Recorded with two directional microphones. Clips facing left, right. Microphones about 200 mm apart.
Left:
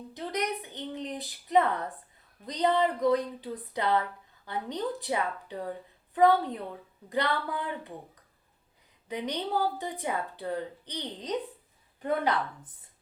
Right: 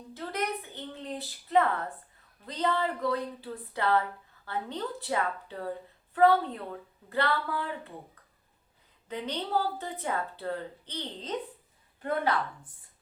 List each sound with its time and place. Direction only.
0.1 s a sound: 15° left (ahead or behind)
2.5 s a woman's voice: 15° left (ahead or behind)
9.0 s a woman's voice: 15° left (ahead or behind)